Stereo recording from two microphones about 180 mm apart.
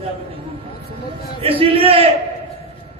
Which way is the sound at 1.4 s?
30° right (ahead or behind).